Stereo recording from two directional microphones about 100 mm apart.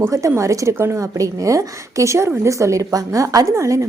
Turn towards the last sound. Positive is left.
turn(degrees=-30)  # may be behind; listen again after turning